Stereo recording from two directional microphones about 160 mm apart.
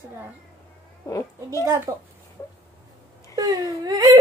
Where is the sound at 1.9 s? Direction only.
20° right (ahead or behind).